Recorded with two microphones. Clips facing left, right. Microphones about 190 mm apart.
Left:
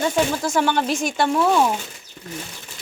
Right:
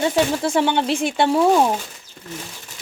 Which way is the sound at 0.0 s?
30° right (ahead or behind).